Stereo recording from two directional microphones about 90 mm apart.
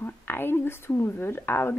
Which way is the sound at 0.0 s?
25° left (ahead or behind).